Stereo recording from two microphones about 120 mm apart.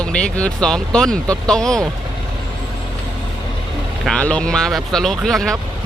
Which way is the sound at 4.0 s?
5° left (ahead or behind).